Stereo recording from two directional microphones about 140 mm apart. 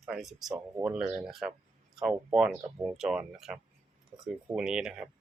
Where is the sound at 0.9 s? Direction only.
5° right (ahead or behind).